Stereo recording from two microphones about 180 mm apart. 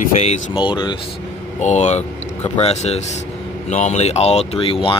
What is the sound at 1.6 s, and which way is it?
Speech, 40° left (ahead or behind).